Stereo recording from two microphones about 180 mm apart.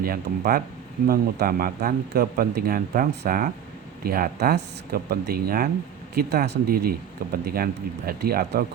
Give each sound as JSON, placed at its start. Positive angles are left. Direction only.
{"t": 0.0, "sound": "speech", "side_deg": -55}
{"t": 6.1, "sound": "speech", "side_deg": -65}